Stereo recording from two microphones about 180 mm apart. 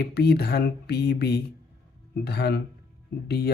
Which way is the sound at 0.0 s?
65° left (ahead or behind).